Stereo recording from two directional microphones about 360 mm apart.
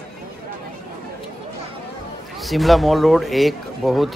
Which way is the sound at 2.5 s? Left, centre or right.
Centre.